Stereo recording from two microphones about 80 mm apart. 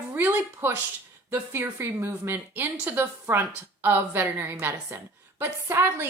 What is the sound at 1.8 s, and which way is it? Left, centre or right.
A woman's voice, right.